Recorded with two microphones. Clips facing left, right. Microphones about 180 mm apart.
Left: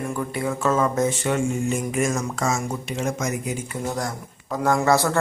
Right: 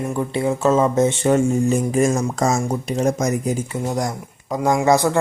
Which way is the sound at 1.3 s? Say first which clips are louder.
Right 6 dB; 35° right (ahead or behind).